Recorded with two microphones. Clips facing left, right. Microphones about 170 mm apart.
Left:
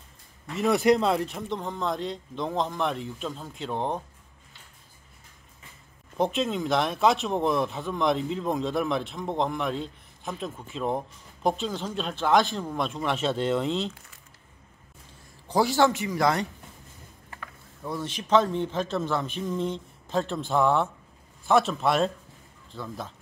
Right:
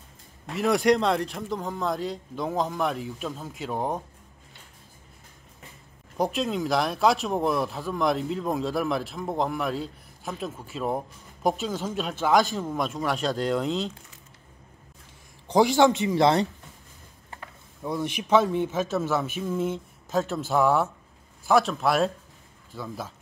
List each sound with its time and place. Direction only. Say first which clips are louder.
0.6 s a man's voice: even; centre (ahead or behind)
6.1 s a man's voice: even; centre (ahead or behind)
15.4 s a man's voice: right 3 dB; 15° right (ahead or behind)
17.8 s a man's voice: right 3 dB; 15° right (ahead or behind)